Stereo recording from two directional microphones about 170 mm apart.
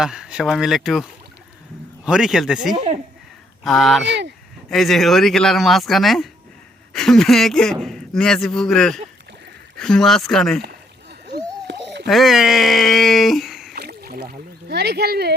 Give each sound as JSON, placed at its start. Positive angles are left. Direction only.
{"t": 0.0, "sound": "speech", "side_deg": -5}
{"t": 2.7, "sound": "speech", "side_deg": -35}
{"t": 3.6, "sound": "speech", "side_deg": 0}
{"t": 4.0, "sound": "speech", "side_deg": -90}
{"t": 4.7, "sound": "speech", "side_deg": 0}
{"t": 11.7, "sound": "a sound", "side_deg": -90}
{"t": 12.0, "sound": "speech", "side_deg": 0}
{"t": 13.7, "sound": "rowboat", "side_deg": -65}